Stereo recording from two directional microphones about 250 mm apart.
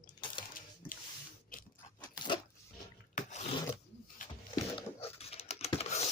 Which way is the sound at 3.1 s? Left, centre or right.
Left.